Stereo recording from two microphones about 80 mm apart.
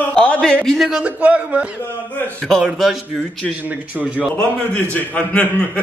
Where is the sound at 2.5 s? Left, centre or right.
Centre.